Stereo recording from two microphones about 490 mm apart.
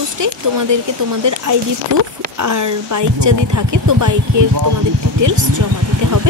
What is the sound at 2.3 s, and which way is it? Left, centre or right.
Speech, right.